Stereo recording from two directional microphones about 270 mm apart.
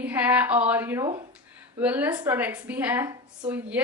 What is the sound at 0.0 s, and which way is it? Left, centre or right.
A woman's voice, centre.